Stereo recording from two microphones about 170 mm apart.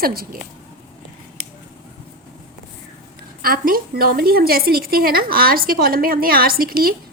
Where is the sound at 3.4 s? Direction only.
60° right (ahead or behind).